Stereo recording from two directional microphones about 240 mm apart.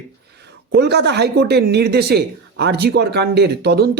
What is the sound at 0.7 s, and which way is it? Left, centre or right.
Speech, right.